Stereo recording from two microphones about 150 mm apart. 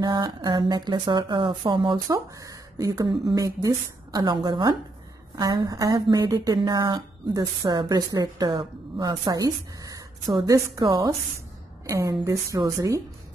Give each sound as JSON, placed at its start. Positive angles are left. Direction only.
{"t": 0.0, "sound": "speech", "side_deg": -25}